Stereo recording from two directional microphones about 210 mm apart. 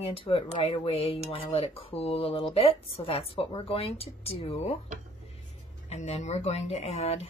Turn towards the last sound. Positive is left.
turn(degrees=30)  # may be behind; listen again after turning